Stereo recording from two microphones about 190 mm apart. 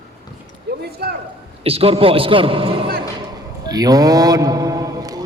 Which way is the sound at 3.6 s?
20° right (ahead or behind).